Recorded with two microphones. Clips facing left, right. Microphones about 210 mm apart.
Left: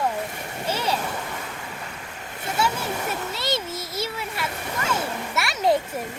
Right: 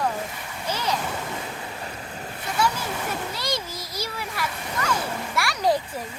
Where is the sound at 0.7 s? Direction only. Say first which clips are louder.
Left 2 dB; 30° left (ahead or behind).